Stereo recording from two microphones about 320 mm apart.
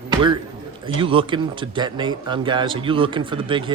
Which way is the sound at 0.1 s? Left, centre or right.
Centre.